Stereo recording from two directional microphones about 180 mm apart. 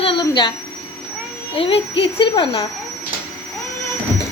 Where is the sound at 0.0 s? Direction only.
25° left (ahead or behind).